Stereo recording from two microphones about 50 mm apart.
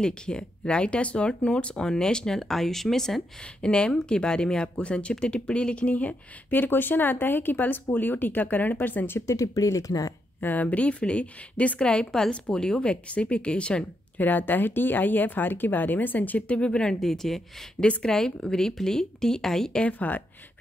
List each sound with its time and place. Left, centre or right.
0.0 s speech: centre
3.6 s speech: centre; by 9.2 s left
9.2 s speech: left
10.4 s speech: left
11.9 s speech: centre
14.1 s speech: left
17.0 s speech: centre
19.8 s speech: left